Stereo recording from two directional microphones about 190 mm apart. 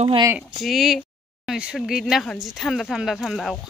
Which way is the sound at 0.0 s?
25° right (ahead or behind).